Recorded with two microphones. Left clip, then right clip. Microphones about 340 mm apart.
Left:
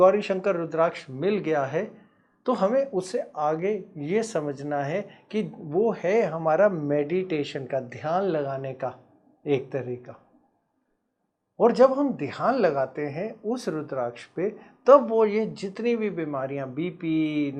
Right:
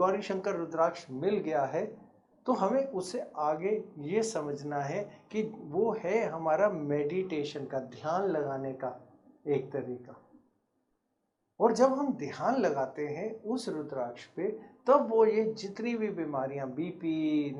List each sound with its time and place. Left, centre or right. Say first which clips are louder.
0.0 s speech: left 10 dB; left
11.8 s speech: left 7 dB; left